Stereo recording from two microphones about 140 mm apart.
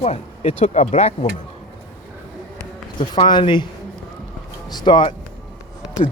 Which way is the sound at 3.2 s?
35° left (ahead or behind).